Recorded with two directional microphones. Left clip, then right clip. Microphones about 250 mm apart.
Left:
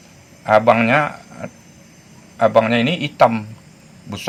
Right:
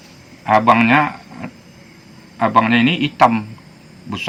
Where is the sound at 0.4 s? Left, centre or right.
Left.